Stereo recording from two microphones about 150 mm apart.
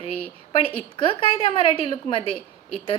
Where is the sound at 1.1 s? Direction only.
35° left (ahead or behind).